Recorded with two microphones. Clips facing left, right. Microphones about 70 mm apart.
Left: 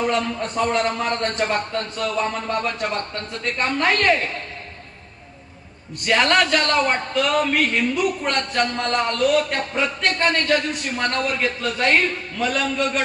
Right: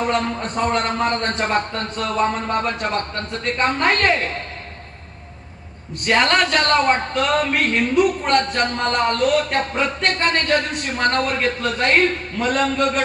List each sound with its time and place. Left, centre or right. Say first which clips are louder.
0.1 s a man's voice: right 1 dB; right
6.2 s a man's voice: right 1 dB; right